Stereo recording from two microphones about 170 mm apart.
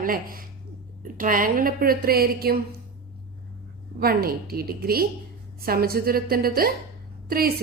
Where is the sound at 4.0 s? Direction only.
60° right (ahead or behind).